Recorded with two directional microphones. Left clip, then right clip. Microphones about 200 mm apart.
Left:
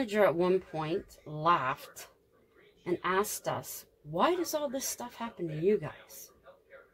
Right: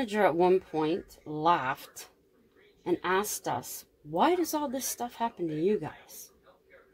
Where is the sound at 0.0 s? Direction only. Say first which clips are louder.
Right 2 dB; 40° right (ahead or behind).